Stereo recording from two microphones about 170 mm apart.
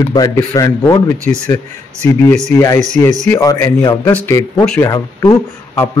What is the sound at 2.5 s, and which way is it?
Speech, 15° left (ahead or behind).